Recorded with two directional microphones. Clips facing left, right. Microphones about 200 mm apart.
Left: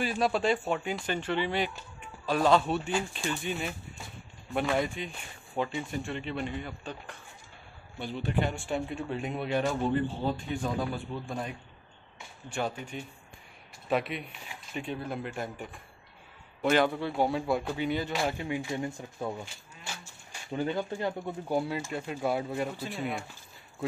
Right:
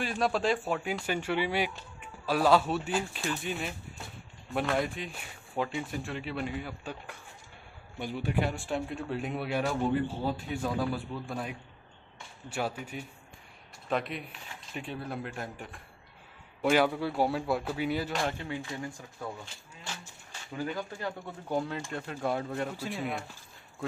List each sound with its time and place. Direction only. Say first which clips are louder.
0.0 s speech: left 1 dB; centre (ahead or behind)
13.8 s speech: left 2 dB; 5° left (ahead or behind)
18.2 s speech: left 2 dB; 10° left (ahead or behind)
20.5 s speech: left 4 dB; 25° left (ahead or behind)
21.5 s speech: left 1 dB; 10° left (ahead or behind)